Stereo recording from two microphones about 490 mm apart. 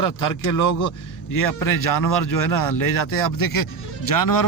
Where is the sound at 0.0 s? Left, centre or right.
Left.